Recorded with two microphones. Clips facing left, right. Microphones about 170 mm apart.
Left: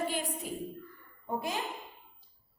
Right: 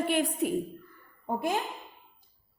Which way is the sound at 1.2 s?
55° right (ahead or behind).